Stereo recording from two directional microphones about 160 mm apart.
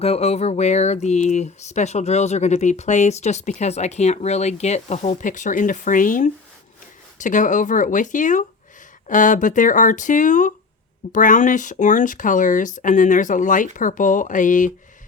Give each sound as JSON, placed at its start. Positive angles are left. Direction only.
{"t": 0.0, "sound": "speech", "side_deg": 40}